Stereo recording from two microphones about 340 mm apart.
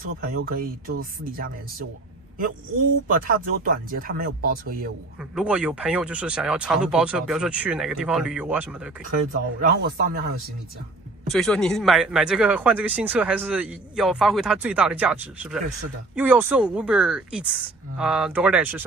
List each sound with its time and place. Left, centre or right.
0.5 s speech: right
3.1 s speech: right
5.3 s a man's voice: centre
9.1 s speech: right
11.2 s a man's voice: centre